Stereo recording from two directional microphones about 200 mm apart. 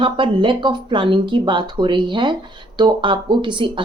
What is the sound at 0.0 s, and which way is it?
Speech, 25° right (ahead or behind).